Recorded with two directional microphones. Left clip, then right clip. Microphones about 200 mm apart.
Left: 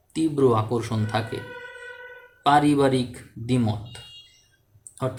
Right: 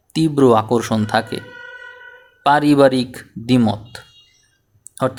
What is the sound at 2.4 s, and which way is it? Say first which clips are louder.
Speech: right 6 dB; 45° right (ahead or behind).